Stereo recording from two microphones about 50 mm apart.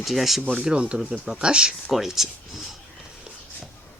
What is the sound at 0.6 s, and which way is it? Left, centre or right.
Speech, centre.